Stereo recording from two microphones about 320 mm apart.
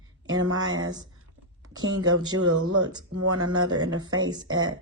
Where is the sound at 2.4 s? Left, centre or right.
Right.